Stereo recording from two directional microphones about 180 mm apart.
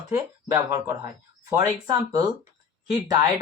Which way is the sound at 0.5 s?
15° right (ahead or behind).